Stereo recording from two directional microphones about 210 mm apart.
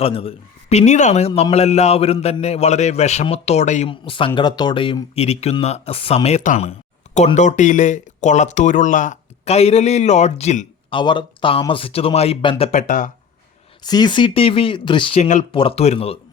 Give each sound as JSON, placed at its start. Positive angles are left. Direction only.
{"t": 0.0, "sound": "speech", "side_deg": 25}
{"t": 10.9, "sound": "speech", "side_deg": 25}
{"t": 13.8, "sound": "speech", "side_deg": 20}